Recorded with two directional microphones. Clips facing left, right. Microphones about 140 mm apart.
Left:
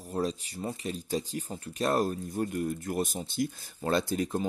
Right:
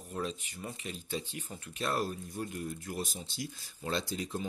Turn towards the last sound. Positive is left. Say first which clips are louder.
# left 7 dB
turn(degrees=50)  # may be behind; listen again after turning